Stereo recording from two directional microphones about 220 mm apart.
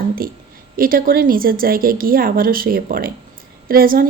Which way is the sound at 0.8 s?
40° right (ahead or behind).